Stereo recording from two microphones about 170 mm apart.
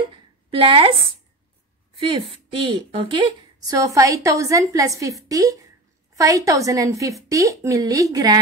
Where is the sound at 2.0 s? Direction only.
30° right (ahead or behind).